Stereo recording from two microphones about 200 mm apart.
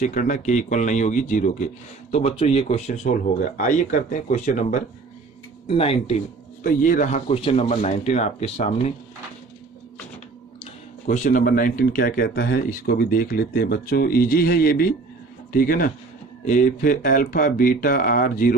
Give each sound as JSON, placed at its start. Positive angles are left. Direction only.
{"t": 0.0, "sound": "speech", "side_deg": 40}
{"t": 5.6, "sound": "speech", "side_deg": 30}
{"t": 6.6, "sound": "speech", "side_deg": 45}
{"t": 11.0, "sound": "speech", "side_deg": 40}